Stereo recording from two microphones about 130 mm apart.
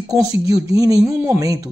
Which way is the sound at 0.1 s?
25° right (ahead or behind).